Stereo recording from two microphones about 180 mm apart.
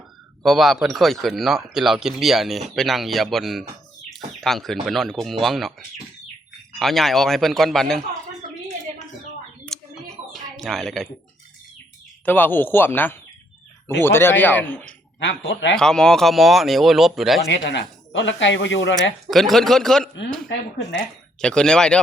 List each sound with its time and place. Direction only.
0.4 s speech: centre (ahead or behind)
6.7 s speech: centre (ahead or behind)
9.7 s a sound: 5° left (ahead or behind)
12.2 s speech: 10° left (ahead or behind)
15.2 s speech: 90° left
15.7 s speech: 5° left (ahead or behind)
17.5 s speech: 85° left
19.3 s speech: centre (ahead or behind)
21.4 s speech: 5° left (ahead or behind)